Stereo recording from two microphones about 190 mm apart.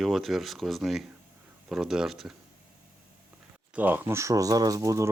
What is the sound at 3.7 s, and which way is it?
Speech, 10° right (ahead or behind).